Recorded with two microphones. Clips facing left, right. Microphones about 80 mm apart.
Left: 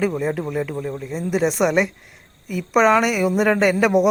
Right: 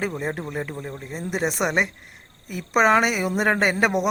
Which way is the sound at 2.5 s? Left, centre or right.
Right.